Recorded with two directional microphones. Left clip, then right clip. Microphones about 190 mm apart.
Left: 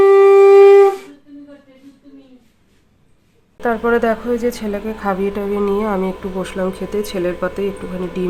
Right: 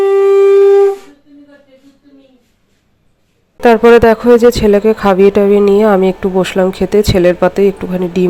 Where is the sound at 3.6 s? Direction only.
45° right (ahead or behind).